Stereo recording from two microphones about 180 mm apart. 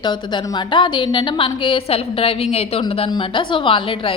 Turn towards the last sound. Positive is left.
turn(degrees=30)  # may be behind; listen again after turning